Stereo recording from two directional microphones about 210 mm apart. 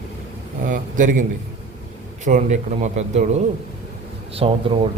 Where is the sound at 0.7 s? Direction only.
40° right (ahead or behind).